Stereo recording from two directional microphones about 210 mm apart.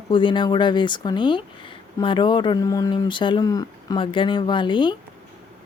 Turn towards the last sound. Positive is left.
turn(degrees=20)  # may be behind; listen again after turning